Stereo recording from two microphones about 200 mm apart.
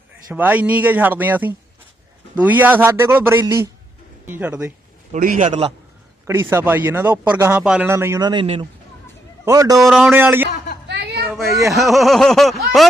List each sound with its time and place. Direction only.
0.3 s speech: 10° right (ahead or behind)
5.1 s a man's voice: 40° right (ahead or behind)
5.5 s a man's voice: 30° right (ahead or behind)
6.2 s speech: 15° right (ahead or behind)
9.8 s speech: 5° right (ahead or behind)
10.8 s a sound: 55° right (ahead or behind)
11.7 s a sound: centre (ahead or behind)